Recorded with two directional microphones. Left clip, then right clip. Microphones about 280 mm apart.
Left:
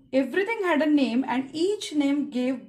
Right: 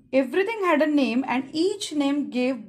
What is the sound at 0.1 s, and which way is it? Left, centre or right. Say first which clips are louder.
A woman's voice: right 2 dB; right.